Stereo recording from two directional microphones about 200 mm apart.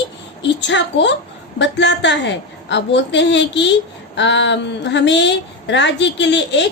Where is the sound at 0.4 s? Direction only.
65° left (ahead or behind).